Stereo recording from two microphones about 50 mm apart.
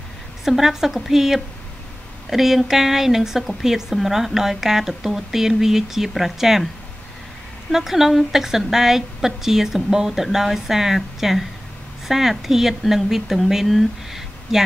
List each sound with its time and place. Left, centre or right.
0.5 s a woman's voice: centre
7.7 s a woman's voice: centre